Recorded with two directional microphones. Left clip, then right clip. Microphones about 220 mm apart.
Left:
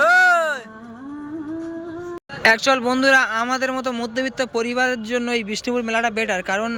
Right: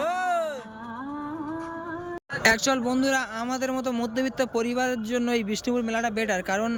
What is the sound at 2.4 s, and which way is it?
A man's voice, centre (ahead or behind).